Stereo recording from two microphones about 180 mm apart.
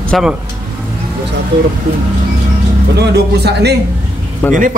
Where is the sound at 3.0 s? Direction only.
65° right (ahead or behind).